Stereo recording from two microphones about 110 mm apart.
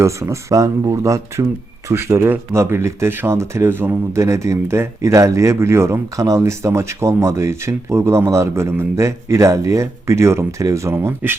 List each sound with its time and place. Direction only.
0.0 s speech: 25° right (ahead or behind)